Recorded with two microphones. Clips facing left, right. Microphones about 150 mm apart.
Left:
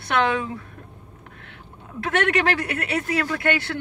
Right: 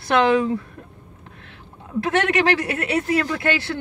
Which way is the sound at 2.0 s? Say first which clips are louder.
Right 2 dB; 30° right (ahead or behind).